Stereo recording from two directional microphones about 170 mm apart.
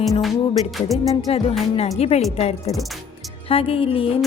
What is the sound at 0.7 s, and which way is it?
Music, centre (ahead or behind).